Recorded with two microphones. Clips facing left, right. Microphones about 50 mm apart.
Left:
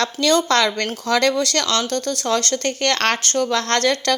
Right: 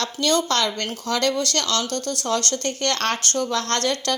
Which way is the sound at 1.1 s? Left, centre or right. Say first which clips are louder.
Left 6 dB; left.